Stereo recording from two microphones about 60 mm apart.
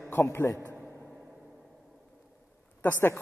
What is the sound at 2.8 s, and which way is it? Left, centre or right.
Speech, left.